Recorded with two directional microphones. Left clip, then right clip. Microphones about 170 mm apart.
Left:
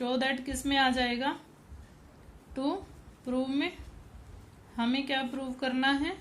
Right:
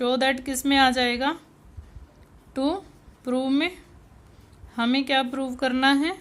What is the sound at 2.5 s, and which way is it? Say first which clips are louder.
A woman's voice: right 7 dB; 55° right (ahead or behind).